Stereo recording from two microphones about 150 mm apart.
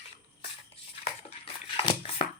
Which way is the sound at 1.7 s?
35° left (ahead or behind).